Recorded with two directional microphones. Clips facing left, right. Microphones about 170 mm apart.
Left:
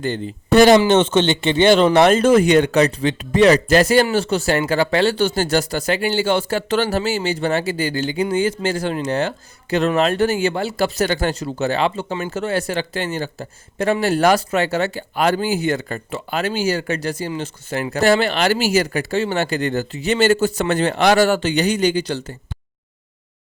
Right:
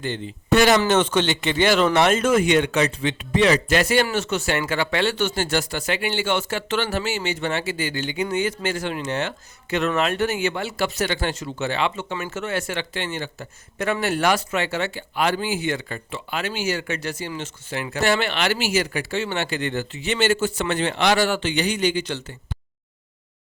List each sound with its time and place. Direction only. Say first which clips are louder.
0.0 s speech: left 5 dB; 35° left (ahead or behind)